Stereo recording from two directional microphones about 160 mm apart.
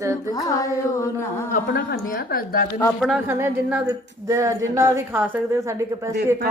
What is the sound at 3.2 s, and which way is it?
A woman's voice, 10° right (ahead or behind).